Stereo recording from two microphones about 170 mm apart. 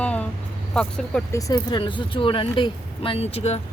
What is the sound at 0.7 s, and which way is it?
Speech, 5° left (ahead or behind).